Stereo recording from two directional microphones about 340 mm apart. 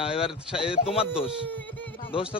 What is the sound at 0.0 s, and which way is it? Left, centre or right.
Speech, centre.